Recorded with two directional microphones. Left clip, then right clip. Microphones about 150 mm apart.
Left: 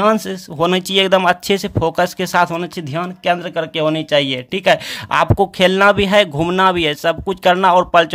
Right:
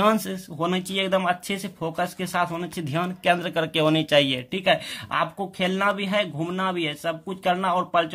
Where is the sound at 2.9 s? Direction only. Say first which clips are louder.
Left 4 dB; 20° left (ahead or behind).